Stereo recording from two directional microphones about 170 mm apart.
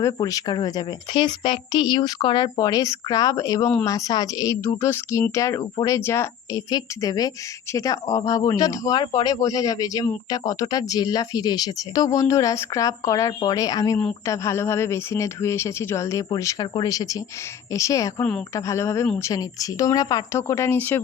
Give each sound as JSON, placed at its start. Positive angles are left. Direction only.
{"t": 0.0, "sound": "speech", "side_deg": 20}